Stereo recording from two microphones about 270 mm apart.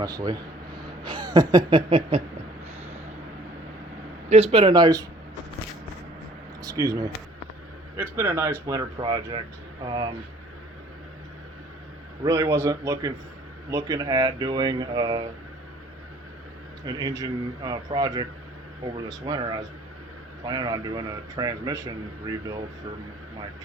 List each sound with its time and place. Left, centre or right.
0.0 s speech: centre
4.3 s speech: right
6.6 s speech: centre
12.2 s speech: centre
16.8 s speech: centre